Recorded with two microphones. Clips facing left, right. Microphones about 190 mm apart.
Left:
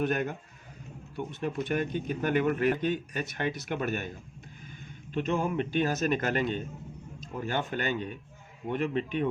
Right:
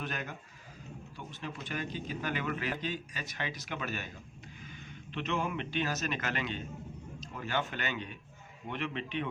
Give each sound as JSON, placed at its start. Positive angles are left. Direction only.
{"t": 0.0, "sound": "a man's voice", "side_deg": 50}
{"t": 5.1, "sound": "a man's voice", "side_deg": 45}